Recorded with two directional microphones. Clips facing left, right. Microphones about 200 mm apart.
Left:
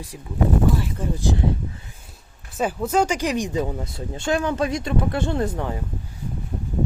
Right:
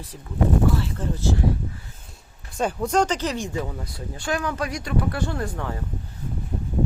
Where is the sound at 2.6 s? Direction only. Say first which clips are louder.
Left 1 dB; 5° left (ahead or behind).